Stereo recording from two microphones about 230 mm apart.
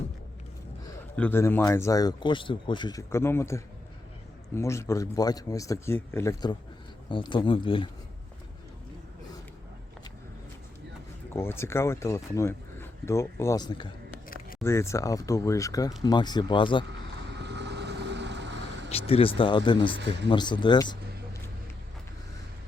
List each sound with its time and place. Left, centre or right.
1.1 s speech: centre
11.3 s speech: centre
17.3 s vehicle: right
18.9 s speech: left
20.0 s speech: right
20.3 s speech: centre